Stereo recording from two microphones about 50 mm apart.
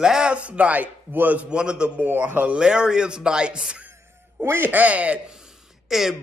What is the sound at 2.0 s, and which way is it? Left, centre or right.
Speech, right.